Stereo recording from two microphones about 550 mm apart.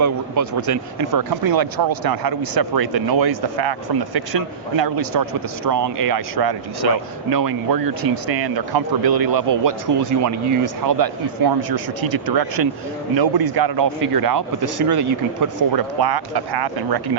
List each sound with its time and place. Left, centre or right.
0.0 s speech: right